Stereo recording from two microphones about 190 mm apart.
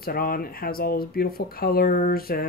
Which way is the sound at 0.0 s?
50° left (ahead or behind).